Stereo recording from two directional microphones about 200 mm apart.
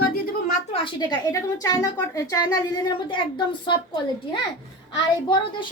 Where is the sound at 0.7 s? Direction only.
25° left (ahead or behind).